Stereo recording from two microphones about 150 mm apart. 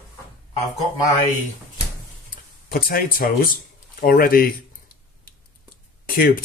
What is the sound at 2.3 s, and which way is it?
Speech, 80° left.